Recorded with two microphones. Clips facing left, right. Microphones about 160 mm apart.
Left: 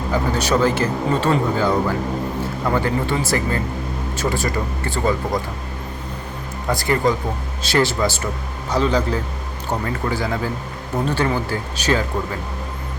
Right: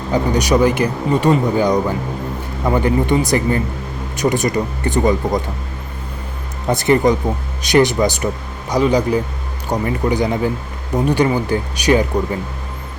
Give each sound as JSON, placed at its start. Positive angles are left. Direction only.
{"t": 0.1, "sound": "speech", "side_deg": -15}
{"t": 6.7, "sound": "speech", "side_deg": -20}